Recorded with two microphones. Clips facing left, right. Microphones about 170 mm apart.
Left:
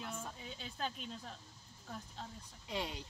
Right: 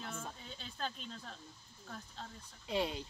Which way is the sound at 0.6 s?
10° left (ahead or behind).